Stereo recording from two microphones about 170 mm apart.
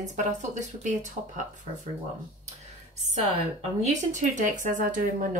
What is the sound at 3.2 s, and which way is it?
A woman's voice, 40° right (ahead or behind).